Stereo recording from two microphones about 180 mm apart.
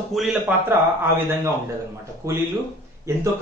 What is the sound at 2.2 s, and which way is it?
Speech, 15° right (ahead or behind).